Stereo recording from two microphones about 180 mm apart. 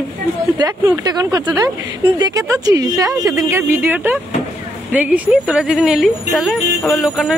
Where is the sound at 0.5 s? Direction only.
20° right (ahead or behind).